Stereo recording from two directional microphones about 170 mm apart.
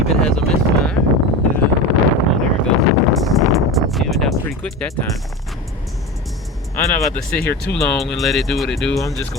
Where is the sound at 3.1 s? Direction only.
Centre (ahead or behind).